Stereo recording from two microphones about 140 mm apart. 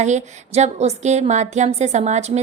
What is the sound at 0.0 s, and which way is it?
A woman's voice, 55° right (ahead or behind).